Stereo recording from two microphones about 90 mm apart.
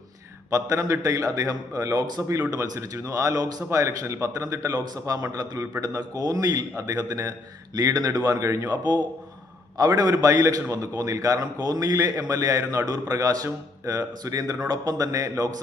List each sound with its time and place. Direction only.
0.5 s a man's voice: 35° right (ahead or behind)
9.7 s a man's voice: 45° right (ahead or behind)